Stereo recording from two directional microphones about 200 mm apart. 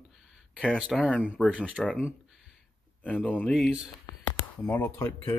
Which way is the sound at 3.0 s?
5° left (ahead or behind).